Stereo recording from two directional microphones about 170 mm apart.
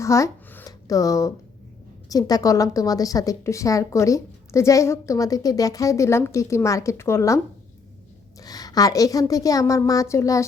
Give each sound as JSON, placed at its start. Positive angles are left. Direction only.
{"t": 0.0, "sound": "a sound", "side_deg": 15}
{"t": 2.0, "sound": "a woman's voice", "side_deg": 20}
{"t": 8.4, "sound": "a woman's voice", "side_deg": 20}